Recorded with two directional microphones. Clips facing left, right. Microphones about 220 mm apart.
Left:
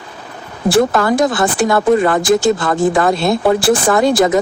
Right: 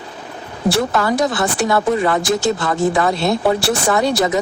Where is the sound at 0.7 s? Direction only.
50° left (ahead or behind).